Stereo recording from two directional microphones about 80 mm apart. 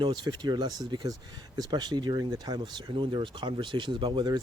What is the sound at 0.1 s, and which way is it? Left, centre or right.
Speech, right.